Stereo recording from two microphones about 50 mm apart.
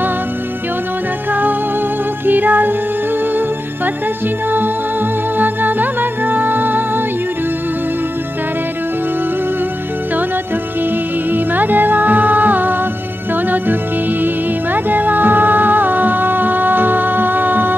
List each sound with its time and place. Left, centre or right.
2.2 s music: right
5.4 s music: right
11.3 s music: right